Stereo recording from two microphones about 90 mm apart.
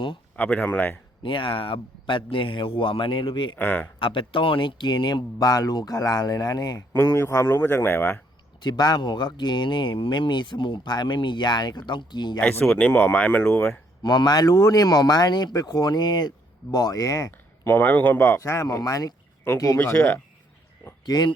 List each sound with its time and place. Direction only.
0.3 s speech: 15° left (ahead or behind)
1.2 s speech: 70° left (ahead or behind)
3.5 s speech: 20° left (ahead or behind)
4.0 s speech: 70° left (ahead or behind); by 6.8 s 45° left (ahead or behind)
6.9 s speech: 30° left (ahead or behind)
8.6 s speech: 50° left (ahead or behind)
12.4 s speech: 20° left (ahead or behind)
14.0 s speech: 50° left (ahead or behind)
16.7 s speech: 45° left (ahead or behind)
17.6 s speech: 25° left (ahead or behind)
21.0 s speech: 50° left (ahead or behind)